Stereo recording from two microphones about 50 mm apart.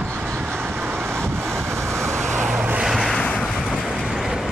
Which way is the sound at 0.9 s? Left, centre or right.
Right.